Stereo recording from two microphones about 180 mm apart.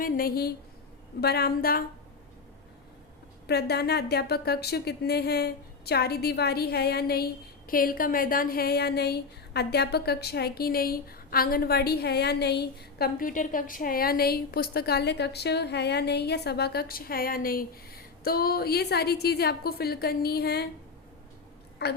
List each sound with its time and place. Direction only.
0.0 s a woman's voice: 55° left (ahead or behind)
3.4 s a woman's voice: 65° left (ahead or behind)
21.8 s a woman's voice: 65° left (ahead or behind)